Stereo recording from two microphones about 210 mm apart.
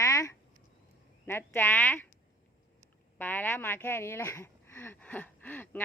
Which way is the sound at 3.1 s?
10° left (ahead or behind).